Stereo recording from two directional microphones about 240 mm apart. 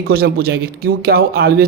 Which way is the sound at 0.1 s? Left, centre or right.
Right.